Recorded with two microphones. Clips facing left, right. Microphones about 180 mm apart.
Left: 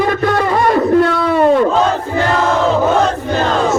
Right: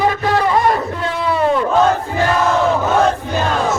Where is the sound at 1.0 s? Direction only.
60° left (ahead or behind).